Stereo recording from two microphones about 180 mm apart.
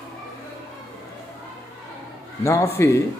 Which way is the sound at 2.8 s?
15° left (ahead or behind).